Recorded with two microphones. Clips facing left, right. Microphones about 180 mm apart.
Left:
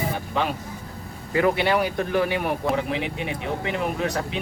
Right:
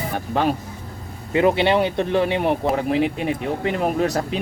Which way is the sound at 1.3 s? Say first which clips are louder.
Right 4 dB; 25° right (ahead or behind).